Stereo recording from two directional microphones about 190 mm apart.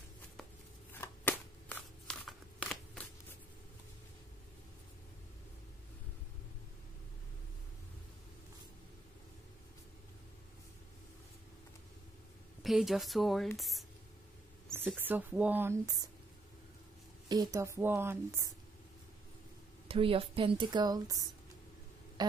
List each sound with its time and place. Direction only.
0.9 s a sound: 10° left (ahead or behind)
12.6 s speech: centre (ahead or behind)
14.7 s speech: 10° right (ahead or behind)
17.3 s speech: 20° right (ahead or behind)
19.9 s speech: 30° right (ahead or behind)